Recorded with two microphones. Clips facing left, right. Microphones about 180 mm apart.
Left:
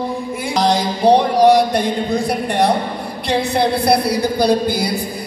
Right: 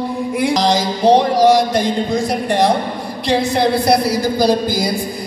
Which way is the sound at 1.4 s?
60° left (ahead or behind).